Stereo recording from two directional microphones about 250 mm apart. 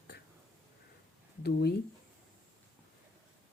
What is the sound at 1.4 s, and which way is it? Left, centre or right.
Speech, left.